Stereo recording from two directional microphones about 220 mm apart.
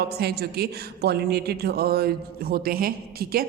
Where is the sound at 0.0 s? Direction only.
45° right (ahead or behind).